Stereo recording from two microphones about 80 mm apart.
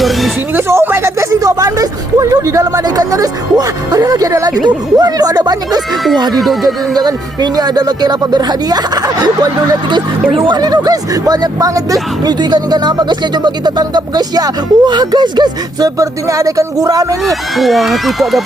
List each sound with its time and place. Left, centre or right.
0.5 s speech: right
6.3 s speech: centre
6.9 s speech: right
10.4 s speech: right
12.2 s speech: right
16.0 s speech: right
17.2 s speech: centre